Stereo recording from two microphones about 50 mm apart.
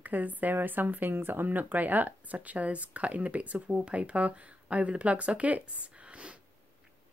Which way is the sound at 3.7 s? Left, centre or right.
Centre.